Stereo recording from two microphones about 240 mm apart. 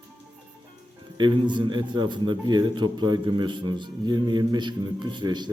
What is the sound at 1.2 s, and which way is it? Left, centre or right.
A man's voice, centre.